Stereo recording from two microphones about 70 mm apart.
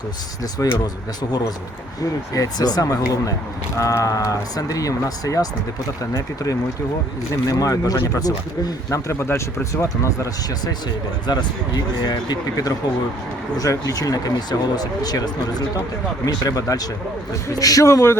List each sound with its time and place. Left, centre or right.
0.6 s speech: left
2.3 s speech: left
3.8 s speech: left
11.3 s speech: left
13.6 s speech: left
16.2 s speech: left
17.8 s speech: left